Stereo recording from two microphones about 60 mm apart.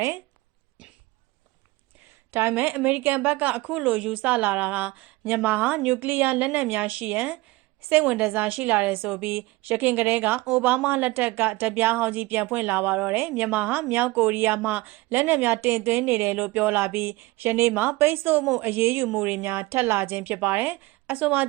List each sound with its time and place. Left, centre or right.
2.5 s a woman's voice: right
3.7 s a woman's voice: centre; by 19.5 s right
19.5 s a woman's voice: right